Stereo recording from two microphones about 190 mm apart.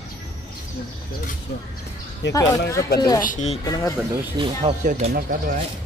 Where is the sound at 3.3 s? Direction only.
40° left (ahead or behind).